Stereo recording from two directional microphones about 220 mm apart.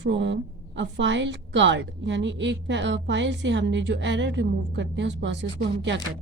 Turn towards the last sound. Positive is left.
turn(degrees=-55)  # may be behind; listen again after turning